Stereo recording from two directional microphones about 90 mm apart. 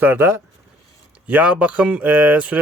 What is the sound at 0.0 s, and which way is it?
Speech, 25° right (ahead or behind).